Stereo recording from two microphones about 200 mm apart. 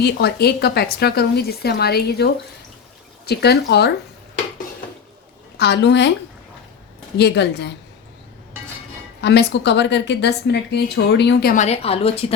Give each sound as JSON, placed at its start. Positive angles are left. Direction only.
{"t": 0.0, "sound": "a woman's voice", "side_deg": 55}
{"t": 5.5, "sound": "a woman's voice", "side_deg": 60}
{"t": 7.2, "sound": "a woman's voice", "side_deg": 55}
{"t": 9.2, "sound": "a woman's voice", "side_deg": 60}
{"t": 11.5, "sound": "a woman's voice", "side_deg": 35}